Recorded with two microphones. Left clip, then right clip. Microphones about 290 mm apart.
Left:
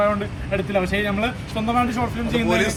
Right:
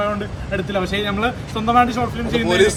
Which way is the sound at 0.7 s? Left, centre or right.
Centre.